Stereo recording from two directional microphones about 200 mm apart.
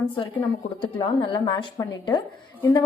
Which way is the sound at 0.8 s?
25° left (ahead or behind).